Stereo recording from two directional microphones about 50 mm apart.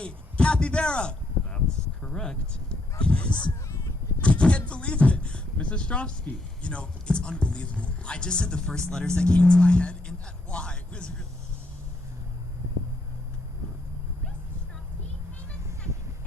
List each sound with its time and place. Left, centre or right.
0.0 s a man's voice: left
1.5 s a sound: centre
3.0 s speech: left